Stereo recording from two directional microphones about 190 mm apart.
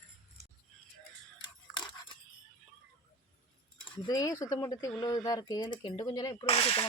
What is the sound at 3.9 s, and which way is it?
Speech, 20° left (ahead or behind).